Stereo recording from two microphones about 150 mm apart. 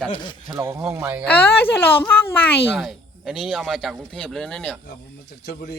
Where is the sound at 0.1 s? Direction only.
30° left (ahead or behind).